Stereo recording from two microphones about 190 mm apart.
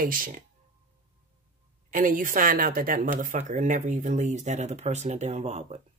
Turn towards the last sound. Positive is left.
turn(degrees=-35)  # may be behind; listen again after turning